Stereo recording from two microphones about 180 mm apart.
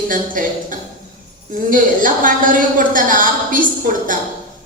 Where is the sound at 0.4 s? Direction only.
50° right (ahead or behind).